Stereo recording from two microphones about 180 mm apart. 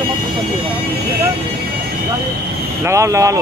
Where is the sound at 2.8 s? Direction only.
15° right (ahead or behind).